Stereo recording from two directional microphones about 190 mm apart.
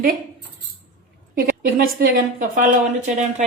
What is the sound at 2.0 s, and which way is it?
Speech, 45° right (ahead or behind).